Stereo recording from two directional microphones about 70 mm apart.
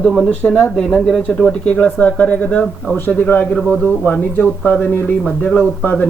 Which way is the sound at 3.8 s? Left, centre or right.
Centre.